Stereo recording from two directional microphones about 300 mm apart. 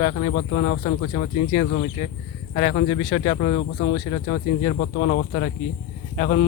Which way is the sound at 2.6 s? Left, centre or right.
Left.